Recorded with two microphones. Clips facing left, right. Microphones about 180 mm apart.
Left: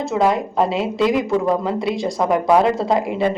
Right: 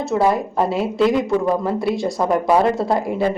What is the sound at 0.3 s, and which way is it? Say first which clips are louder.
Speech: even; 25° left (ahead or behind).